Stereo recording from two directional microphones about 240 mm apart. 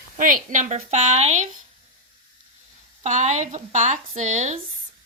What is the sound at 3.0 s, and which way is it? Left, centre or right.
Speech, right.